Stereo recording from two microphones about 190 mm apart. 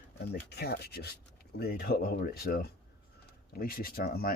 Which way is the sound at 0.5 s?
55° left (ahead or behind).